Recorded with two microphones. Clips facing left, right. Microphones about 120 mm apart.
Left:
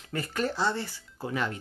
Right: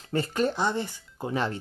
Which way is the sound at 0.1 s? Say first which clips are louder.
Right 5 dB; 25° right (ahead or behind).